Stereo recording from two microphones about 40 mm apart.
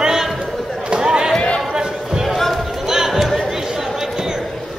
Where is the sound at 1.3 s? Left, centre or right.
Centre.